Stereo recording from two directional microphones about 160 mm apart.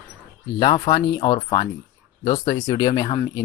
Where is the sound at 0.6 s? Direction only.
25° left (ahead or behind).